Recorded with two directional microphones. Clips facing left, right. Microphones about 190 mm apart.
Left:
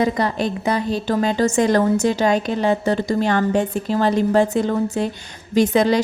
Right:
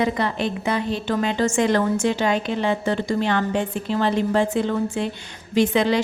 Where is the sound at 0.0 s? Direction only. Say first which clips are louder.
Left 3 dB; 40° left (ahead or behind).